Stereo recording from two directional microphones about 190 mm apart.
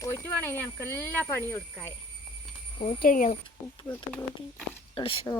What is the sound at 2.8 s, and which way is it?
Speech, 45° left (ahead or behind).